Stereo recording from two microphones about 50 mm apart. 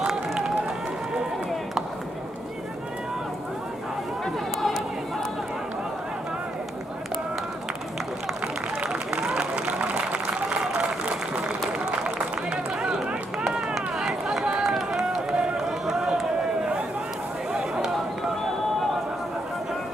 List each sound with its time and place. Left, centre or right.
0.0 s run: centre
4.6 s run: centre
8.8 s run: centre
10.7 s applause: right
12.8 s run: centre
17.5 s a sound: centre